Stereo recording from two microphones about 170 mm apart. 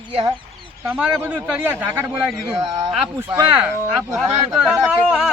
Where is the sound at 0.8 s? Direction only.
10° right (ahead or behind).